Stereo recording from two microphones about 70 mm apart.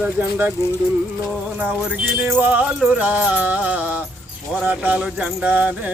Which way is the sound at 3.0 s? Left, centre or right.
Right.